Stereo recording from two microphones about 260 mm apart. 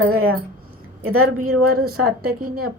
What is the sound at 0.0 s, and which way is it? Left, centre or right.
A woman's voice, right.